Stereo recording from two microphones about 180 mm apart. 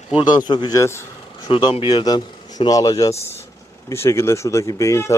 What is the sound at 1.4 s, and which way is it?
Speech, 25° left (ahead or behind).